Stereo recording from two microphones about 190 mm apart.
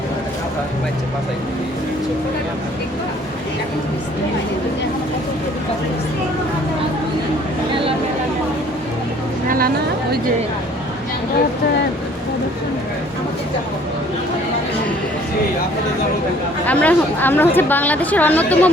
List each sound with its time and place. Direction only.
9.5 s speech: 50° right (ahead or behind)
16.6 s speech: 10° left (ahead or behind)